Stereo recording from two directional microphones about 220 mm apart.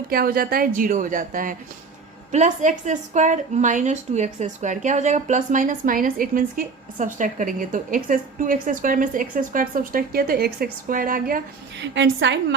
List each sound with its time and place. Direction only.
0.1 s a woman's voice: 45° right (ahead or behind)